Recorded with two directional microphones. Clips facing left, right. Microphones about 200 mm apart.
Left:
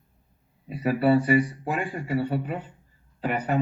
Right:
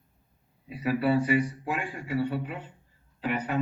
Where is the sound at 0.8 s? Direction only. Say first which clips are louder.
Left 4 dB; 45° left (ahead or behind).